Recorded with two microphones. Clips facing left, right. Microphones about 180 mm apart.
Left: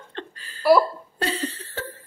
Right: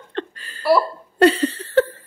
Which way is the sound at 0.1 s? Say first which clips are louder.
Right 9 dB; 70° right (ahead or behind).